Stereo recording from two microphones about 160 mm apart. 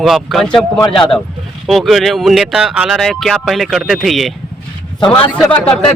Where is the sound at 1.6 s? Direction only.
Centre (ahead or behind).